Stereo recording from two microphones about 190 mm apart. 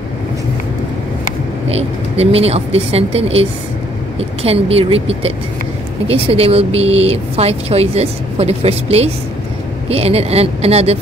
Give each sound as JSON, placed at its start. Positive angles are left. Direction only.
{"t": 1.7, "sound": "speech", "side_deg": -30}